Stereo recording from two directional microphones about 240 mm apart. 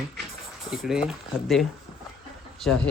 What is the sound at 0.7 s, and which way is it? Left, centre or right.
Speech, centre.